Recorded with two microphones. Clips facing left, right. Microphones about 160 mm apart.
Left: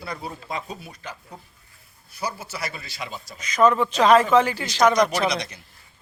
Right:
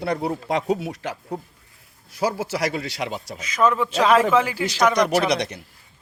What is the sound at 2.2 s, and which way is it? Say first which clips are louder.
A man's voice: right 8 dB; 90° right.